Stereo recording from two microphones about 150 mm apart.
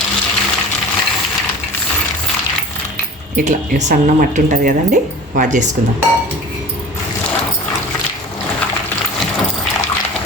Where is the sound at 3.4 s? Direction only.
50° right (ahead or behind).